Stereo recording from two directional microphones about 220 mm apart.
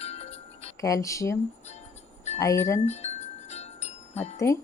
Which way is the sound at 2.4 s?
15° left (ahead or behind).